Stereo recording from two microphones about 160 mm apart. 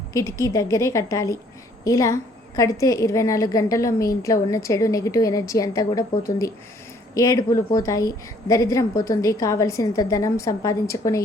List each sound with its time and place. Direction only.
0.1 s a woman's voice: 20° left (ahead or behind)